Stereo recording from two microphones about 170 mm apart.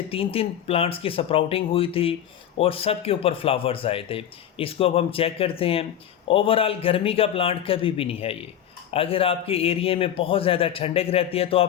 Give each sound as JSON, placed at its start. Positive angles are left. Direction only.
{"t": 0.1, "sound": "a man's voice", "side_deg": 35}